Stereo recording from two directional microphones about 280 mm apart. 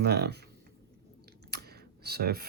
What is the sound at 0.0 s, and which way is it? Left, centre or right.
Speech, right.